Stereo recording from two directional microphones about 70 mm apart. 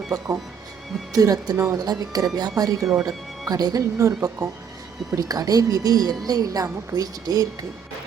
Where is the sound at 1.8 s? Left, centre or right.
Right.